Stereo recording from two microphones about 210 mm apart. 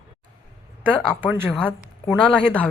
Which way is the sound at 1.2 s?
10° right (ahead or behind).